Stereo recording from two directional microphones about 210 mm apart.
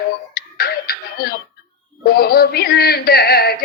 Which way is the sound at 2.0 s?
50° left (ahead or behind).